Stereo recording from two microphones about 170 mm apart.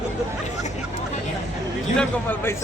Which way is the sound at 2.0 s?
10° left (ahead or behind).